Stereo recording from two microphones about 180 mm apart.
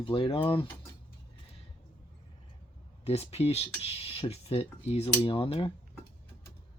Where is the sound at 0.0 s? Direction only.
30° left (ahead or behind).